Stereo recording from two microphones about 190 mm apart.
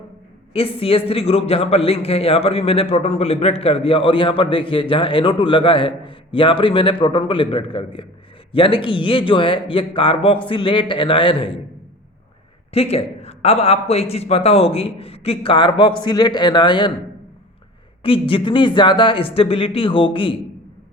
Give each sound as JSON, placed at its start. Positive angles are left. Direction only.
{"t": 0.5, "sound": "a man's voice", "side_deg": 30}
{"t": 12.7, "sound": "a man's voice", "side_deg": 30}
{"t": 18.0, "sound": "a man's voice", "side_deg": 30}